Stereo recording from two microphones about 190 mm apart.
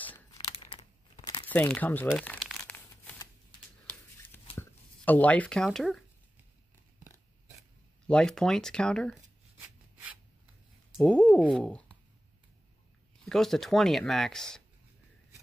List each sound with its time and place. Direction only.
0.5 s a sound: 25° left (ahead or behind)
1.5 s speech: 10° left (ahead or behind)
2.0 s crumpling: centre (ahead or behind)
4.6 s speech: 10° left (ahead or behind)
8.1 s speech: 5° left (ahead or behind)
11.0 s speech: 5° left (ahead or behind)
13.2 s speech: centre (ahead or behind)